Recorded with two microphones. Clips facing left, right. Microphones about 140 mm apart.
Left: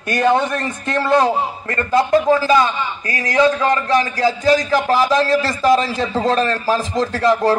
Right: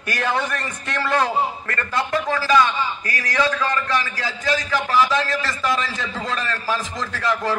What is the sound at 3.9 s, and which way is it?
A man's voice, 40° left (ahead or behind).